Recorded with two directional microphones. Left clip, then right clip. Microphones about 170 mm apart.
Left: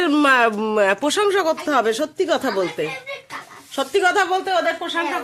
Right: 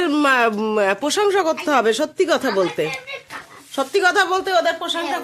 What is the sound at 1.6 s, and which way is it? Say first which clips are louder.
Speech: right 2 dB; 20° right (ahead or behind).